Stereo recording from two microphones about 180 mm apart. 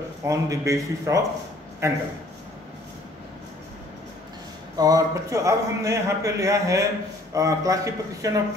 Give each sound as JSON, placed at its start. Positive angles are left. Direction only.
{"t": 0.2, "sound": "speech", "side_deg": -15}
{"t": 4.7, "sound": "a man's voice", "side_deg": -20}